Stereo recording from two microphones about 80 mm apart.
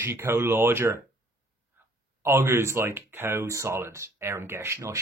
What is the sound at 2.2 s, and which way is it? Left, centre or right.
Speech, right.